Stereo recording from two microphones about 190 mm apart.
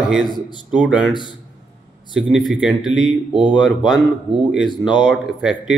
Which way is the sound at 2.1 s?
Centre (ahead or behind).